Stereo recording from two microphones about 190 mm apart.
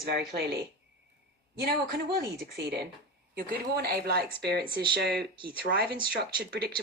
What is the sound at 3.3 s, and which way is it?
Speech, 55° right (ahead or behind).